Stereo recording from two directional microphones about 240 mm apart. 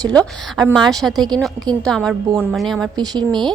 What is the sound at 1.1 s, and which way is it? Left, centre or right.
Speech, centre.